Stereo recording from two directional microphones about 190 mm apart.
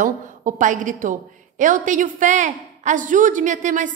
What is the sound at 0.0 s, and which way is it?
A woman's voice, 40° right (ahead or behind).